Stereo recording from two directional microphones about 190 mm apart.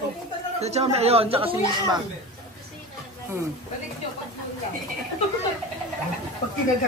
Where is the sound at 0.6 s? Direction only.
35° right (ahead or behind).